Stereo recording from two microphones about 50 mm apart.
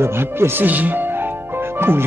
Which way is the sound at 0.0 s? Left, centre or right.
Right.